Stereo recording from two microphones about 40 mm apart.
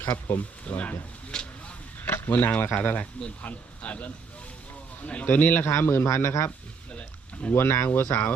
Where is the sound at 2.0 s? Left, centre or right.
Left.